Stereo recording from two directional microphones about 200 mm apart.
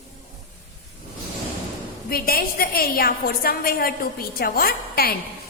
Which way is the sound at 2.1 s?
50° left (ahead or behind).